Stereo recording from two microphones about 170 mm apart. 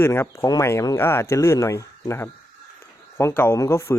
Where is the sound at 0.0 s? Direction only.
15° left (ahead or behind).